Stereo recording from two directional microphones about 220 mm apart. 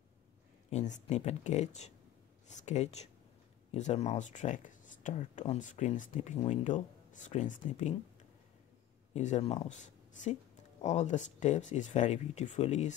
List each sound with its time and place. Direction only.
0.7 s speech: 30° left (ahead or behind)
9.1 s speech: 30° left (ahead or behind)